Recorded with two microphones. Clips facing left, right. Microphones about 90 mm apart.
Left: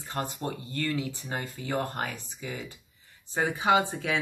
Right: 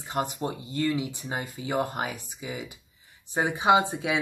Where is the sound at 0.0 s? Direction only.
15° right (ahead or behind).